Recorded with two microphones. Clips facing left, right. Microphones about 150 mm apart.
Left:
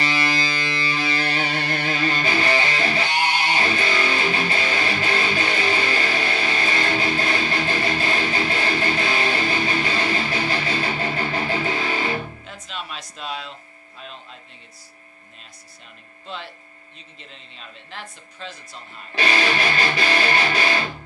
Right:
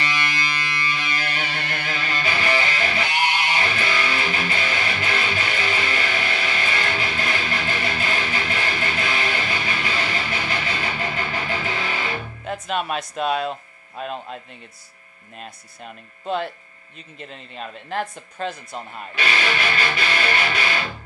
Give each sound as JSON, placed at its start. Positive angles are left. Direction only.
{"t": 0.0, "sound": "music", "side_deg": 30}
{"t": 12.5, "sound": "speech", "side_deg": -55}
{"t": 15.4, "sound": "speech", "side_deg": -55}
{"t": 19.1, "sound": "music", "side_deg": 35}